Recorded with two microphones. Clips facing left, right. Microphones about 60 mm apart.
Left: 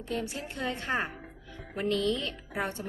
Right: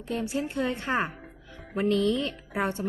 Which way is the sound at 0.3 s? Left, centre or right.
Centre.